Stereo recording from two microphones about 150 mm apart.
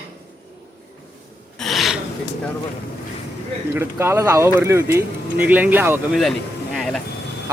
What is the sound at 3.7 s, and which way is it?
Speech, 15° right (ahead or behind).